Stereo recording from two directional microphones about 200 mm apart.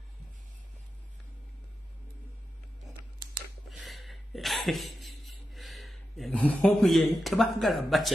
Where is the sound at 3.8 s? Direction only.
Centre (ahead or behind).